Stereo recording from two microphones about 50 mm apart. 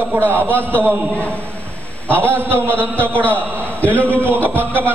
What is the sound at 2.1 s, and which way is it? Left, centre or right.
A man's voice, right.